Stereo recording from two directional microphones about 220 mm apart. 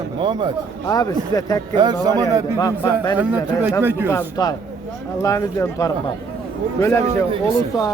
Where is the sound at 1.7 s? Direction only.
20° right (ahead or behind).